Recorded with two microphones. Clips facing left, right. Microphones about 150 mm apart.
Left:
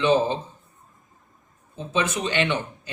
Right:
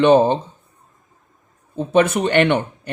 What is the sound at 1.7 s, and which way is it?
Speech, 60° right (ahead or behind).